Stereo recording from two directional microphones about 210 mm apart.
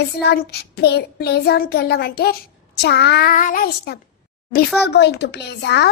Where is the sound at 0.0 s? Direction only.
50° left (ahead or behind).